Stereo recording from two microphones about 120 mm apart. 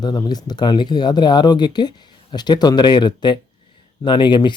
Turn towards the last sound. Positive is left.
turn(degrees=40)  # may be behind; listen again after turning